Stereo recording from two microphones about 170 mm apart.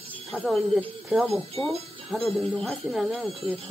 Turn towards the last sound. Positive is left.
turn(degrees=-35)  # may be behind; listen again after turning